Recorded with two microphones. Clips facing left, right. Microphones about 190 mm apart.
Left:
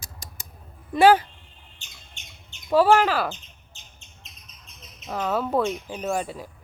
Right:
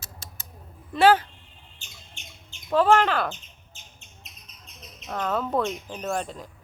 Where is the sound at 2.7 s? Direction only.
5° left (ahead or behind).